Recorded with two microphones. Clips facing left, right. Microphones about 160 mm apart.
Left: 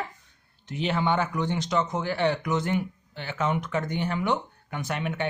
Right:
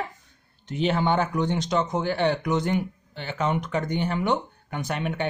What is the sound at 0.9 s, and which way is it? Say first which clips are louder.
Speech: right 1 dB; 40° right (ahead or behind).